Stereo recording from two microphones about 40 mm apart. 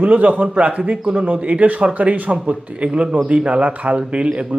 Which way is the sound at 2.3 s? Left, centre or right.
Right.